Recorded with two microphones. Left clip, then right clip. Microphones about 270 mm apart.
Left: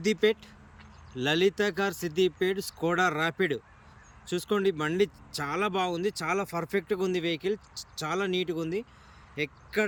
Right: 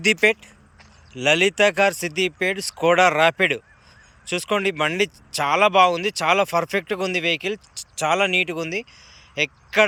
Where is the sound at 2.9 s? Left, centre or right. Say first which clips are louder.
Right 10 dB; right.